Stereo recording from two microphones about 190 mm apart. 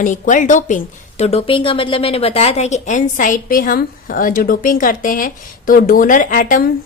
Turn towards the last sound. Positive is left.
turn(degrees=45)  # may be behind; listen again after turning